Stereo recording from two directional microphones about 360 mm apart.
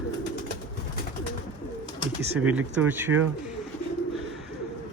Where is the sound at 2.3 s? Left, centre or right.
Centre.